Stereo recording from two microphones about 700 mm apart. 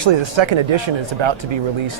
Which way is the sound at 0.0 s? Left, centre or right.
Right.